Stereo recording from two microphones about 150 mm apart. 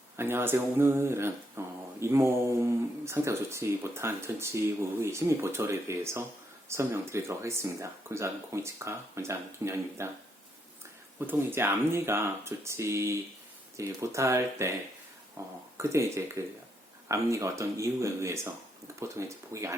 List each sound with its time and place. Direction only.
0.2 s speech: 15° right (ahead or behind)
11.2 s speech: 15° right (ahead or behind)